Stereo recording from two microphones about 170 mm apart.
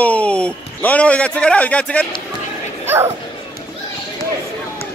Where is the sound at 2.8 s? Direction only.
15° right (ahead or behind).